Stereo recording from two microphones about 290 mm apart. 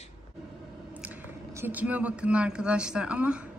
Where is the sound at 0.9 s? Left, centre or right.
Centre.